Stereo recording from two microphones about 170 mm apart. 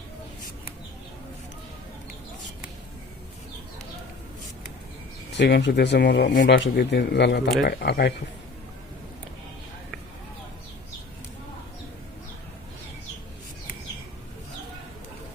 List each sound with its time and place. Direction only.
5.4 s speech: 85° left